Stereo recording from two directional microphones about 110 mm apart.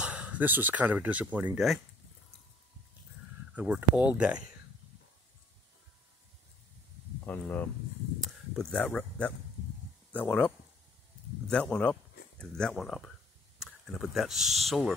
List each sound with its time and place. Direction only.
0.0 s speech: 10° right (ahead or behind)
3.5 s speech: 10° right (ahead or behind)
7.2 s speech: 15° left (ahead or behind)